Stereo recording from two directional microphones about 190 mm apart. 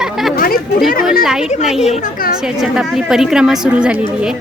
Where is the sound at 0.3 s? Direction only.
50° left (ahead or behind).